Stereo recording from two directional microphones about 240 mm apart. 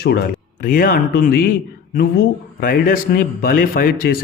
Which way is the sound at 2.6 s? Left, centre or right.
Left.